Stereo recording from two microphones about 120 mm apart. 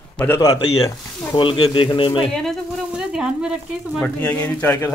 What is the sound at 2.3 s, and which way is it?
Speech, 5° left (ahead or behind).